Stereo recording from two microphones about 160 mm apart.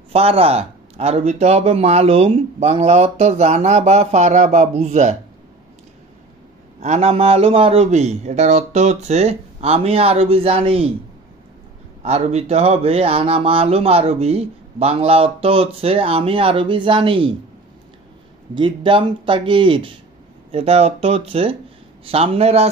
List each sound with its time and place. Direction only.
0.1 s speech: 40° right (ahead or behind)
6.8 s speech: 45° right (ahead or behind)
12.0 s speech: 45° right (ahead or behind)
18.5 s speech: 30° right (ahead or behind)